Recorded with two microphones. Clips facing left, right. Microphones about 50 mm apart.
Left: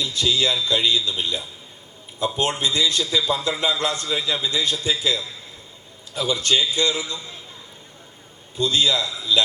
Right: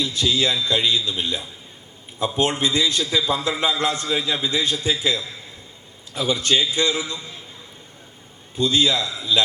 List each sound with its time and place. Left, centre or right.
0.0 s a man's voice: right
8.5 s a man's voice: right